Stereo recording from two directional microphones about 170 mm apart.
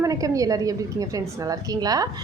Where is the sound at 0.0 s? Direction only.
20° right (ahead or behind).